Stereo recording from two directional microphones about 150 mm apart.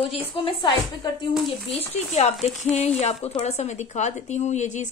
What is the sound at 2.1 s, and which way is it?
Speech, 45° left (ahead or behind).